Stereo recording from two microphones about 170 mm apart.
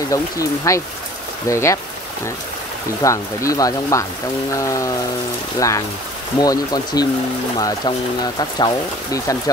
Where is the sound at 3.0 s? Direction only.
20° left (ahead or behind).